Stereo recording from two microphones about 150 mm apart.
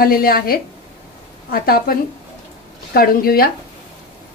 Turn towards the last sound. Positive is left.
turn(degrees=80)